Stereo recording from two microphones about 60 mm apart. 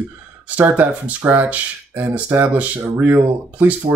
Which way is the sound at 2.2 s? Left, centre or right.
Right.